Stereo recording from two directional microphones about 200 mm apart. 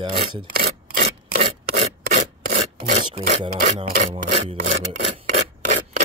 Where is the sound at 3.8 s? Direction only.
30° right (ahead or behind).